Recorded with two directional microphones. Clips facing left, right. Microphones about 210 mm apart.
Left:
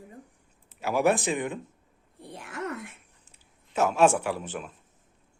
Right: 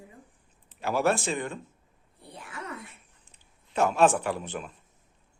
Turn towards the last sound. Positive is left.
turn(degrees=5)  # may be behind; listen again after turning